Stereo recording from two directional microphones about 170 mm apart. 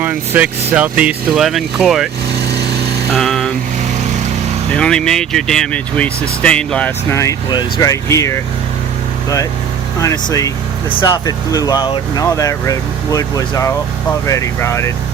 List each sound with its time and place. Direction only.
0.0 s speech: 10° right (ahead or behind)
3.1 s vehicle: centre (ahead or behind)
4.7 s speech: 5° left (ahead or behind)
10.0 s speech: 20° left (ahead or behind)